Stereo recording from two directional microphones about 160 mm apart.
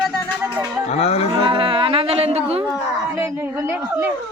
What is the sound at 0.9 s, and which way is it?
Cattle, 40° left (ahead or behind).